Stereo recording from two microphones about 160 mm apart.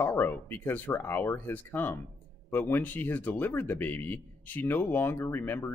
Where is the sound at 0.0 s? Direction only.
10° left (ahead or behind).